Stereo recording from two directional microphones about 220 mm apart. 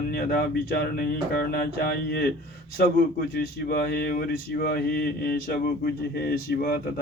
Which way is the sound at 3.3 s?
45° left (ahead or behind).